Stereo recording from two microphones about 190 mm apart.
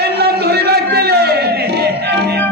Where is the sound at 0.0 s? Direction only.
55° right (ahead or behind).